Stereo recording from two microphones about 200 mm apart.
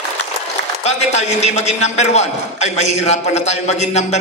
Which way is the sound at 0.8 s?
35° left (ahead or behind).